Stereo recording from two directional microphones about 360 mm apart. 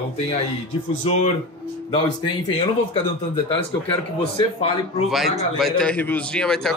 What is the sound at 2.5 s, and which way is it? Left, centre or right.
A man's voice, centre.